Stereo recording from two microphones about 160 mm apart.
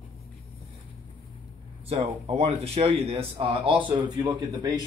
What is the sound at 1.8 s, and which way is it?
Speech, 35° right (ahead or behind).